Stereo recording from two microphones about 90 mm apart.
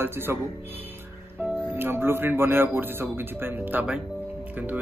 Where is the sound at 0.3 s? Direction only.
25° right (ahead or behind).